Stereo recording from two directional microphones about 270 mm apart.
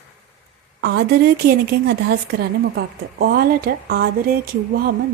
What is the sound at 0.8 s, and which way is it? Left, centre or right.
A woman's voice, right.